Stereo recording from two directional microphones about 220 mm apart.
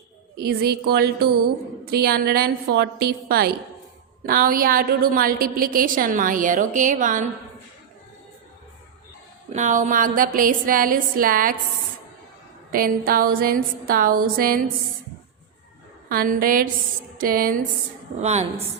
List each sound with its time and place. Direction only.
0.3 s a woman's voice: 45° right (ahead or behind)
9.5 s a woman's voice: 35° right (ahead or behind)
12.7 s a woman's voice: 40° right (ahead or behind)
16.0 s a woman's voice: 40° right (ahead or behind)